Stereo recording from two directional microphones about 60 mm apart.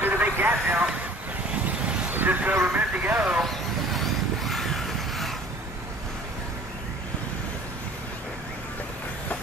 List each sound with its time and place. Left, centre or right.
0.0 s vehicle: right
1.5 s vehicle: right
2.0 s vehicle: right
3.4 s vehicle: centre